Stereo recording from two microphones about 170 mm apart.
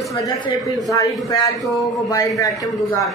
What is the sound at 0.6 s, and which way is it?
A man's voice, 20° left (ahead or behind).